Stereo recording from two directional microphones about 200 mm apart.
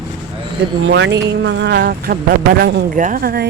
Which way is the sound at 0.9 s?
60° right (ahead or behind).